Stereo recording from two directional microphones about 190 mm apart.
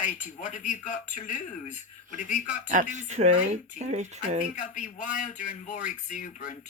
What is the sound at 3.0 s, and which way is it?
Speech, 35° right (ahead or behind).